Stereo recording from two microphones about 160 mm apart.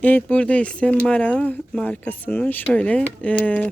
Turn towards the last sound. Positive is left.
turn(degrees=10)  # may be behind; listen again after turning